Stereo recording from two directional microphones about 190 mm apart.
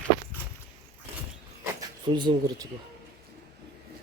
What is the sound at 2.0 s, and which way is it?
Speech, 25° right (ahead or behind).